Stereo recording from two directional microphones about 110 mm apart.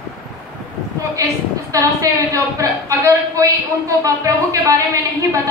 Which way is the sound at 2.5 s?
30° right (ahead or behind).